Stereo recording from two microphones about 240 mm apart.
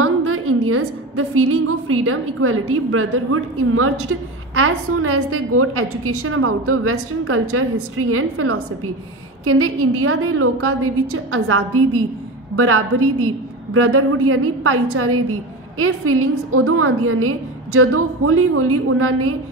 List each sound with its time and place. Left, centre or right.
0.0 s a woman's voice: right